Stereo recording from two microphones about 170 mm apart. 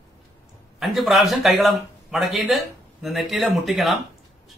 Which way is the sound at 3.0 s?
Centre (ahead or behind).